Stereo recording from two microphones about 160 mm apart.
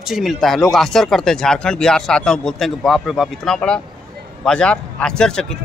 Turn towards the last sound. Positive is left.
turn(degrees=5)  # may be behind; listen again after turning